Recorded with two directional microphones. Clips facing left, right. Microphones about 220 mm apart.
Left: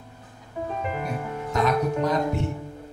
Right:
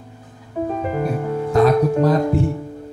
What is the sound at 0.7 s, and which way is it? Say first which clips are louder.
Music: right 7 dB; 40° right (ahead or behind).